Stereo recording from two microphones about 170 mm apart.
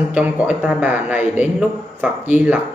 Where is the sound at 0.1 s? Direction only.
10° right (ahead or behind).